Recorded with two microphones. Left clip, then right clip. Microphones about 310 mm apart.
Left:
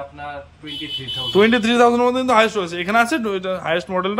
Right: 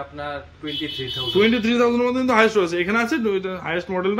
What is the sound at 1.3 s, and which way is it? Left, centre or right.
A man's voice, centre.